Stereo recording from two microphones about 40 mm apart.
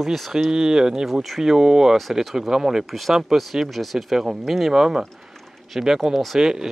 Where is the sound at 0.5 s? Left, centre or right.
Centre.